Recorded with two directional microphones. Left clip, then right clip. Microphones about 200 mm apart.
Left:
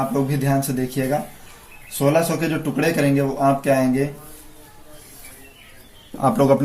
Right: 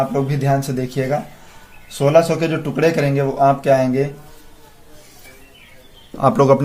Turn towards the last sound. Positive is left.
turn(degrees=-40)  # may be behind; listen again after turning